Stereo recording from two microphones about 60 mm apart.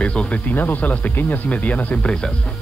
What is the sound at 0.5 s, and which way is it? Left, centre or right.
Speech, left.